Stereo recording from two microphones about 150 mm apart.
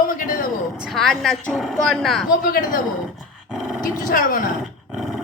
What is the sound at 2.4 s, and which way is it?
Speech, 65° left (ahead or behind).